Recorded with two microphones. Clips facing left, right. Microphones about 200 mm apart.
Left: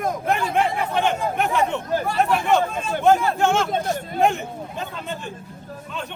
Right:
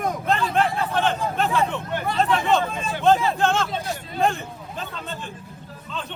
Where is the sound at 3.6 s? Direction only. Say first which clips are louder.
Left 5 dB; 50° left (ahead or behind).